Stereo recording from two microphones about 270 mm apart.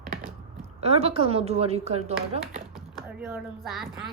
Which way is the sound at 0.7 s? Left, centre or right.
Right.